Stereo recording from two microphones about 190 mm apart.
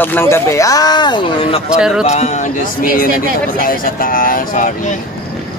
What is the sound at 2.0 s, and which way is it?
Speech, 35° left (ahead or behind).